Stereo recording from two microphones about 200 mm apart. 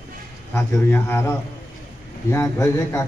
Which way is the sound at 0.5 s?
10° left (ahead or behind).